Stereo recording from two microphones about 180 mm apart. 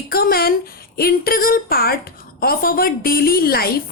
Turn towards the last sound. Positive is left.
turn(degrees=55)  # may be behind; listen again after turning